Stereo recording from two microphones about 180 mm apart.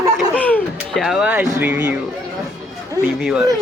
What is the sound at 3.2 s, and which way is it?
Speech, 5° right (ahead or behind).